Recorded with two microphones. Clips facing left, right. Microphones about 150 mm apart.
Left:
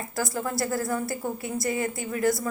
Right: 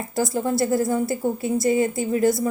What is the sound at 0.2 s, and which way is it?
A woman's voice, 25° right (ahead or behind).